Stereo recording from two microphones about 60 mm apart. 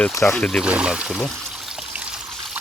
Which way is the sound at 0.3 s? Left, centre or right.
Centre.